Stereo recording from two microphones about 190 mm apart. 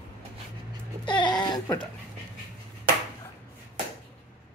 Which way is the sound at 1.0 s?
25° left (ahead or behind).